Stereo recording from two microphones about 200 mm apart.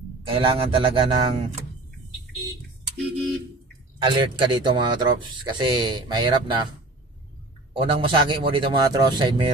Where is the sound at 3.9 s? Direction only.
25° right (ahead or behind).